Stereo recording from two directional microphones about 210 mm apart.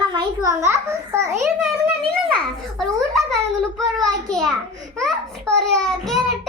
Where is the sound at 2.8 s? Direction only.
Centre (ahead or behind).